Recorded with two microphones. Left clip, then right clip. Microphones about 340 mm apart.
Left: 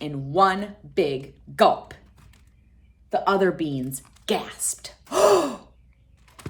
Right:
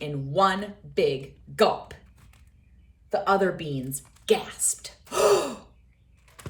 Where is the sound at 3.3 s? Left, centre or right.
Centre.